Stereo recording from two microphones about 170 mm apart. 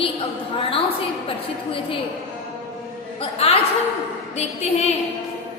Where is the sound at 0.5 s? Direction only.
30° left (ahead or behind).